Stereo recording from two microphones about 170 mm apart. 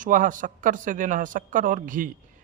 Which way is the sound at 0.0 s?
50° right (ahead or behind).